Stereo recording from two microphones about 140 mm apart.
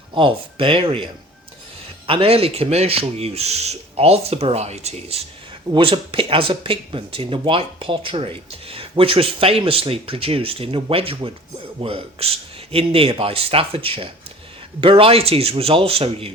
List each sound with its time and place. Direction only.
0.1 s speech: 40° right (ahead or behind)
2.0 s speech: 40° right (ahead or behind)
5.7 s speech: 40° right (ahead or behind)